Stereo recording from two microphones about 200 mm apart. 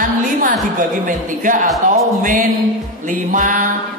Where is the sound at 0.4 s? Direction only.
40° right (ahead or behind).